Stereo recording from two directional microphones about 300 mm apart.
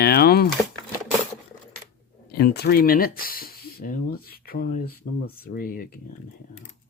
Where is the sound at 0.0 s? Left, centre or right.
Left.